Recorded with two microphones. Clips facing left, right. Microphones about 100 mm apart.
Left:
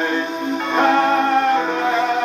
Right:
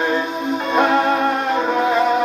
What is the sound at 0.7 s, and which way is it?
Music, 5° right (ahead or behind).